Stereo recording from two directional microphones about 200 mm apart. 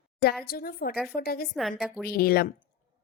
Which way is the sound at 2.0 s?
50° left (ahead or behind).